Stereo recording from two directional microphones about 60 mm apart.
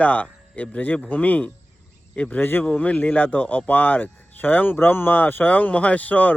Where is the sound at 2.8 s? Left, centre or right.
Left.